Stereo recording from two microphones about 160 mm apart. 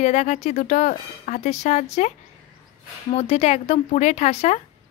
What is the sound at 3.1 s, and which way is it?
Speech, 40° left (ahead or behind).